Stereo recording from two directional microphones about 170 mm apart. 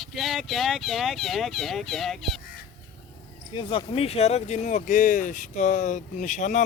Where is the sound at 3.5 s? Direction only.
30° left (ahead or behind).